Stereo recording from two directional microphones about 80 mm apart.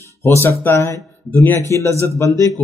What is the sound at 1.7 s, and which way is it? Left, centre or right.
Speech, left.